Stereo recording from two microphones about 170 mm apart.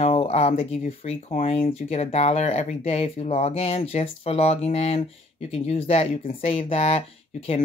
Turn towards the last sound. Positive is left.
turn(degrees=35)  # may be behind; listen again after turning